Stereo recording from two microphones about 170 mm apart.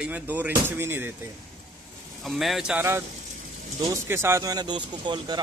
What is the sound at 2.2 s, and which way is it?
Speech, centre (ahead or behind).